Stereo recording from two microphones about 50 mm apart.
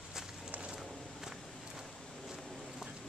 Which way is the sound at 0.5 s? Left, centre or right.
Right.